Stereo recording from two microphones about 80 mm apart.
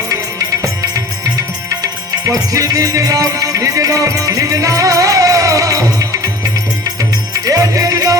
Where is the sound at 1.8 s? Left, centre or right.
Right.